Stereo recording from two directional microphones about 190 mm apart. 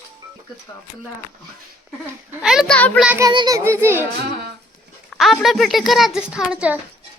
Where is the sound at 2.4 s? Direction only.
Centre (ahead or behind).